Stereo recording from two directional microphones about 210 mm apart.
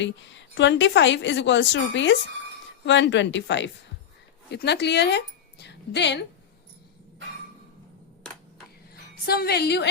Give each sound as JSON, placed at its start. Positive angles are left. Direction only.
{"t": 0.0, "sound": "a woman's voice", "side_deg": 60}
{"t": 9.2, "sound": "a woman's voice", "side_deg": 50}